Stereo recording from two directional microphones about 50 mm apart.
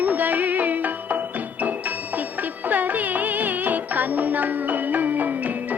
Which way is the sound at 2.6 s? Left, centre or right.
Right.